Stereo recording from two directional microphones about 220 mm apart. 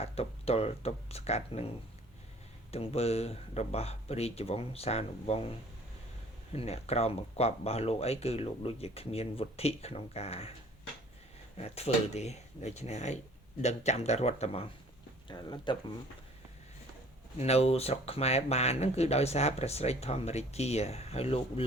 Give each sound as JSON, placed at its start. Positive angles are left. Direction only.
{"t": 0.0, "sound": "speech", "side_deg": 25}
{"t": 2.7, "sound": "speech", "side_deg": 30}
{"t": 6.5, "sound": "speech", "side_deg": 30}
{"t": 11.5, "sound": "speech", "side_deg": 30}
{"t": 17.3, "sound": "speech", "side_deg": 30}